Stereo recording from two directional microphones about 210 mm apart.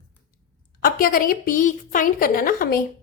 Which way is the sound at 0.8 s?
45° left (ahead or behind).